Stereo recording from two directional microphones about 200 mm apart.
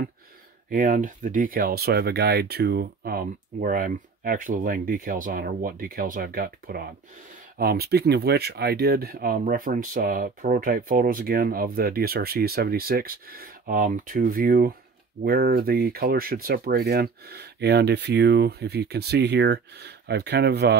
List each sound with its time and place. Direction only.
0.7 s speech: 40° right (ahead or behind)